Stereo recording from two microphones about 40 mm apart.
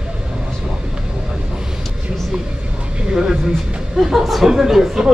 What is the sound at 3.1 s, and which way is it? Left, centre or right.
Speech, right.